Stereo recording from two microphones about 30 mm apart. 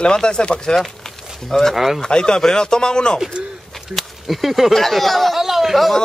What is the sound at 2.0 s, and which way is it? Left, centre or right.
Speech, left.